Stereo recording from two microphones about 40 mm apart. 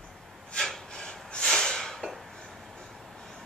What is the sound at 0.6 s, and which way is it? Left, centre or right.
Snort, centre.